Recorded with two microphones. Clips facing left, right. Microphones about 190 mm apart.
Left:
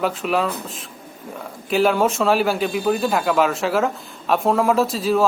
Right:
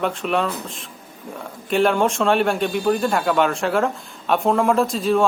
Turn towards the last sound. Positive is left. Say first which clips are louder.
# even
turn(degrees=0)  # may be behind; listen again after turning